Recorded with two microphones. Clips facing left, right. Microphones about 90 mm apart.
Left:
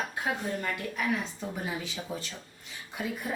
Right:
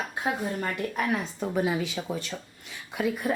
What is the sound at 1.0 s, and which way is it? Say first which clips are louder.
Speech: right 2 dB; 50° right (ahead or behind).